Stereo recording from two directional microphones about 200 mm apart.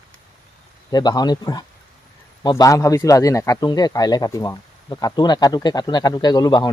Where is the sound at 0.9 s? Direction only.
20° left (ahead or behind).